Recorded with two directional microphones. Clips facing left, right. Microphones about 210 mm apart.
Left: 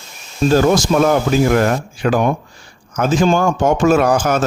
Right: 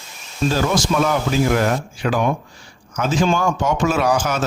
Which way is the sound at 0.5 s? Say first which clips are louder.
Left 7 dB; 50° left (ahead or behind).